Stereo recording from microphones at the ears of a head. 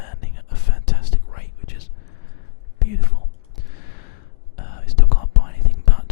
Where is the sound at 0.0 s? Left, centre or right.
Left.